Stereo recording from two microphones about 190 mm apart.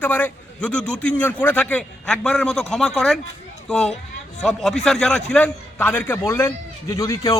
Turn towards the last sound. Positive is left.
turn(degrees=15)  # may be behind; listen again after turning